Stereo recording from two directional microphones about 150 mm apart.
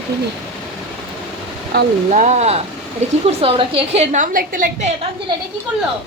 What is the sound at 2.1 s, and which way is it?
A woman's voice, 50° right (ahead or behind).